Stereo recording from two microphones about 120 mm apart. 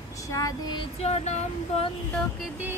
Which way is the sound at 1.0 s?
65° left (ahead or behind).